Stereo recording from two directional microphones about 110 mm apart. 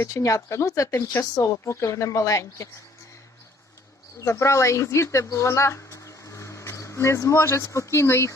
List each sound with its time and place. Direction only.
0.1 s speech: 30° left (ahead or behind)
4.2 s speech: 25° left (ahead or behind)